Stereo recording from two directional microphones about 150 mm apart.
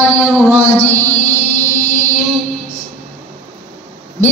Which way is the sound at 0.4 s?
10° left (ahead or behind).